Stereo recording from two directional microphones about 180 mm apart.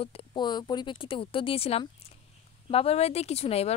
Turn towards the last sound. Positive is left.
turn(degrees=35)  # may be behind; listen again after turning